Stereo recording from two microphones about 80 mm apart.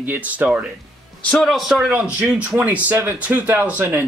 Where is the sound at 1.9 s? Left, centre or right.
Centre.